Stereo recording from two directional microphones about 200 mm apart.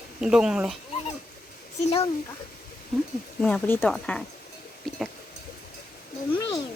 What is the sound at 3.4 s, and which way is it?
Speech, 5° left (ahead or behind).